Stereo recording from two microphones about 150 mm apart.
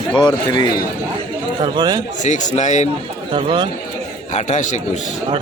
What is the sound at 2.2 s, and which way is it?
Speech, 50° left (ahead or behind).